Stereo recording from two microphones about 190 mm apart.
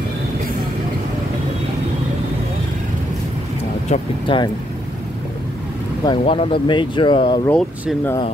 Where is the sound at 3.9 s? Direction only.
25° left (ahead or behind).